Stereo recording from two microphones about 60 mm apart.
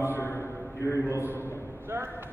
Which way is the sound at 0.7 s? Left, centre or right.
Left.